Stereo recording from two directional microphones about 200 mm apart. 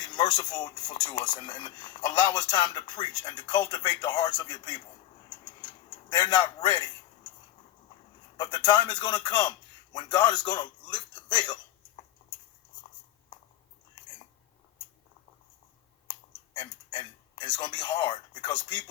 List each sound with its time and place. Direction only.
0.0 s speech: 20° left (ahead or behind)
5.5 s a sound: 20° left (ahead or behind)
8.4 s a man's voice: 20° left (ahead or behind)
16.6 s speech: 20° left (ahead or behind)